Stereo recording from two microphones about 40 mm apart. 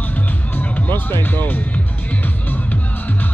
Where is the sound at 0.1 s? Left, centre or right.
Left.